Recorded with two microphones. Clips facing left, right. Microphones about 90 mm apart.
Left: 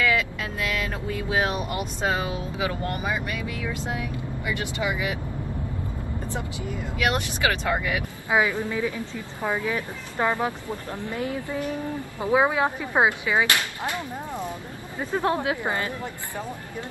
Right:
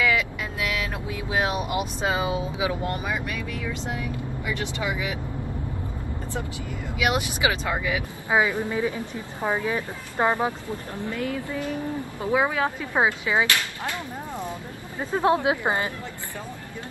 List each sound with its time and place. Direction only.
0.0 s vehicle: 10° right (ahead or behind)
1.4 s speech: 10° right (ahead or behind)
2.9 s speech: 5° left (ahead or behind)
7.0 s speech: 10° right (ahead or behind)
7.6 s speech: centre (ahead or behind)
8.3 s speech: 20° right (ahead or behind)
11.1 s a woman's voice: 20° left (ahead or behind)
15.0 s speech: 15° right (ahead or behind)